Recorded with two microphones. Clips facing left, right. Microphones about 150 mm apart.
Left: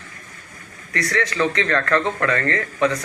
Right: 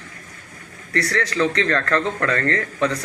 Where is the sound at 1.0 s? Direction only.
35° right (ahead or behind).